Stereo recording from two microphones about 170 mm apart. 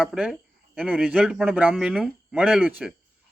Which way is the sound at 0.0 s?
5° right (ahead or behind).